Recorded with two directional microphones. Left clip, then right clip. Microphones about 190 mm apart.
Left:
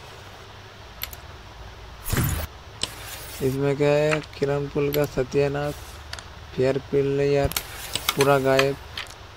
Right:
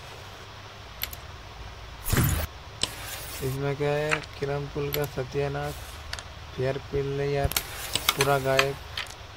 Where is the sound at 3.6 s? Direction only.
25° left (ahead or behind).